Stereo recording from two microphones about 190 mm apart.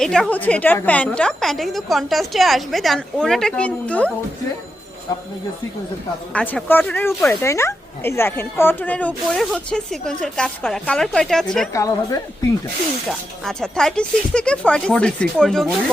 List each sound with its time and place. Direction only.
0.0 s speech: 5° left (ahead or behind)
6.3 s speech: 10° left (ahead or behind)
11.7 s speech: 15° left (ahead or behind)
13.1 s speech: centre (ahead or behind)